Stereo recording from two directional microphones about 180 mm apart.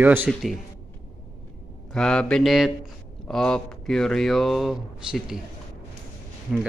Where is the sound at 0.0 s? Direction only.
10° right (ahead or behind).